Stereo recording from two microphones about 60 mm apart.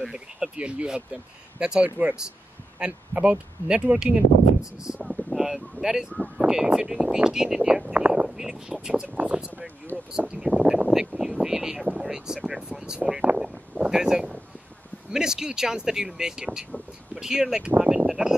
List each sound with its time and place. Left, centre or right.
0.0 s speech: centre
9.1 s speech: right
13.4 s a sound: centre
15.0 s speech: centre
17.6 s speech: right
18.0 s speech: centre